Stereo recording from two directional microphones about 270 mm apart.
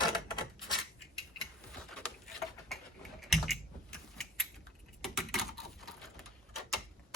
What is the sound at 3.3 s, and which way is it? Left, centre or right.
Typing, centre.